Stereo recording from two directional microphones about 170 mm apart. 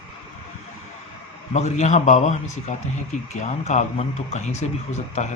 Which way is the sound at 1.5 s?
40° left (ahead or behind).